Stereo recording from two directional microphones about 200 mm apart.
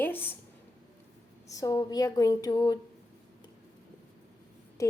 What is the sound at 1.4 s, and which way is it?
Speech, 15° left (ahead or behind).